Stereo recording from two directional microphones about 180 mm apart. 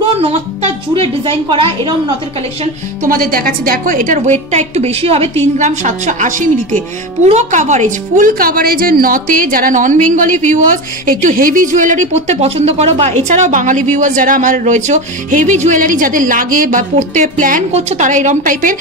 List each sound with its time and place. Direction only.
0.2 s music: 35° right (ahead or behind)
2.6 s speech: 50° right (ahead or behind)